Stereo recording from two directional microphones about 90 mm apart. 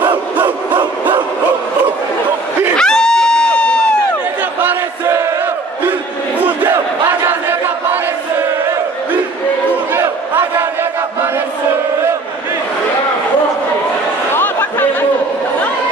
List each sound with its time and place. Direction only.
2.8 s a sound: 10° left (ahead or behind)
5.0 s battle cry: 35° right (ahead or behind)
6.4 s battle cry: 20° right (ahead or behind)
9.9 s crowd: 30° right (ahead or behind)
14.3 s chatter: 20° left (ahead or behind)